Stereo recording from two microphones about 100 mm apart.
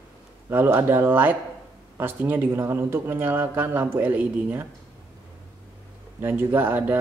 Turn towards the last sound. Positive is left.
turn(degrees=-20)  # may be behind; listen again after turning